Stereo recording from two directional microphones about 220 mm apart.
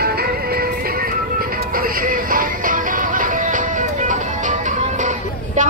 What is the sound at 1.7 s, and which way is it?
Music, 40° right (ahead or behind).